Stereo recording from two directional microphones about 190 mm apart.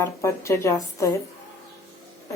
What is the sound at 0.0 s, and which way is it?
A woman's voice, 15° left (ahead or behind).